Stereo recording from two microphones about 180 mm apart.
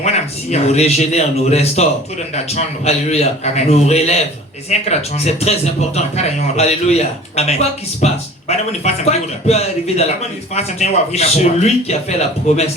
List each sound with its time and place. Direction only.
0.5 s a man's voice: 35° left (ahead or behind)